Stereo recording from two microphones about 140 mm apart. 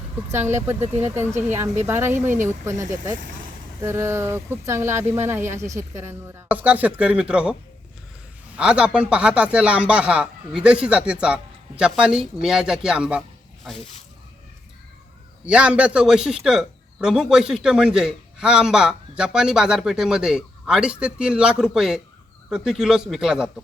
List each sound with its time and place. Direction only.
0.3 s speech: 15° right (ahead or behind)
8.5 s speech: 5° right (ahead or behind)
15.4 s speech: 10° right (ahead or behind)